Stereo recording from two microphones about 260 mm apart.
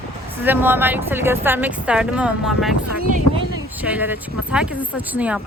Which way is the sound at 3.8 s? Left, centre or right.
Centre.